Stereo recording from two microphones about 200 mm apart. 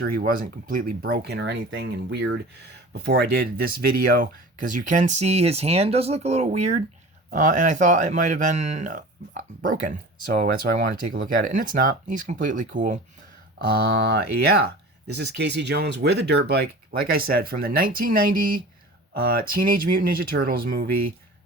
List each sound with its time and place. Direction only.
0.0 s speech: 50° right (ahead or behind)
14.0 s speech: 55° right (ahead or behind)